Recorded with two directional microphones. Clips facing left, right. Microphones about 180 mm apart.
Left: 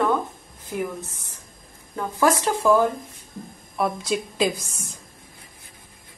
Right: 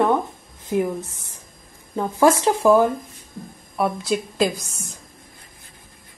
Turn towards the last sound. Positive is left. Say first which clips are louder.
# right 2 dB
turn(degrees=0)  # may be behind; listen again after turning